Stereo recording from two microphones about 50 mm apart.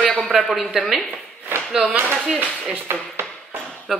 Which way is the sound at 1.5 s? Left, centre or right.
Right.